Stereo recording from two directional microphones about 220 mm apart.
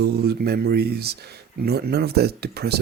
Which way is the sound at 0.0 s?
50° right (ahead or behind).